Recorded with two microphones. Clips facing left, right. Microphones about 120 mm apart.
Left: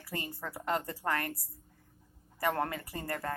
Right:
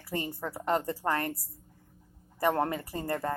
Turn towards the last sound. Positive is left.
turn(degrees=-25)  # may be behind; listen again after turning